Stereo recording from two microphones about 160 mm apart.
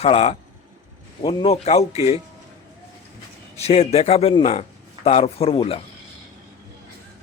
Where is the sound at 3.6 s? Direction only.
40° left (ahead or behind).